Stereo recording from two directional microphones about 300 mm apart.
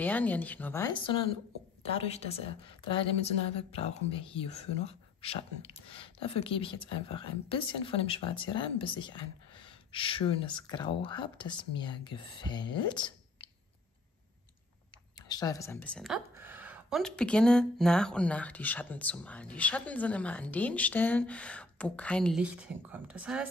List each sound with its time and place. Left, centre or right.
0.0 s a woman's voice: centre
3.5 s a woman's voice: centre
15.2 s a woman's voice: centre